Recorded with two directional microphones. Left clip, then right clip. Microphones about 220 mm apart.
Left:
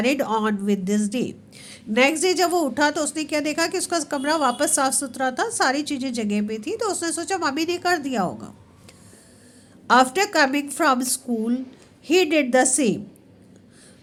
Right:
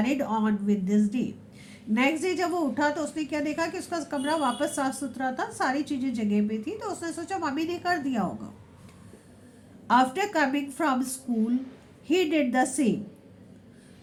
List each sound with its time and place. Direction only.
0.0 s speech: 45° left (ahead or behind)
9.8 s speech: 45° left (ahead or behind)